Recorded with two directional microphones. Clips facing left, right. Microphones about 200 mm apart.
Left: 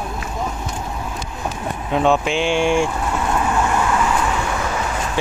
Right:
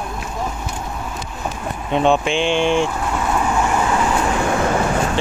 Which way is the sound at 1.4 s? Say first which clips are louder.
Left 1 dB; 5° left (ahead or behind).